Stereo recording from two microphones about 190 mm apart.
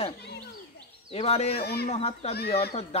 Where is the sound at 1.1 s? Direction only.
35° left (ahead or behind).